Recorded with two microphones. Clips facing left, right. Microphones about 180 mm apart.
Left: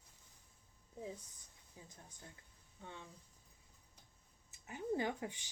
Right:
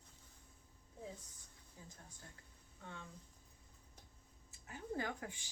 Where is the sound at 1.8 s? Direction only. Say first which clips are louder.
Left 1 dB; 15° left (ahead or behind).